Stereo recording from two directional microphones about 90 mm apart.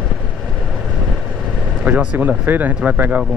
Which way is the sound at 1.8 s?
15° right (ahead or behind).